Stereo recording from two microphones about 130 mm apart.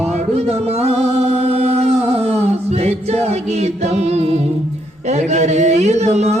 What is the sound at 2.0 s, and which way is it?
Chant, 50° right (ahead or behind).